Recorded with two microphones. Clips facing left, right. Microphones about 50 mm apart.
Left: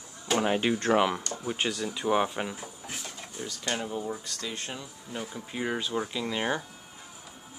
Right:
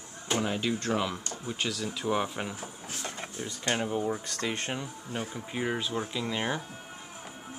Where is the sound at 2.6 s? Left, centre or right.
Right.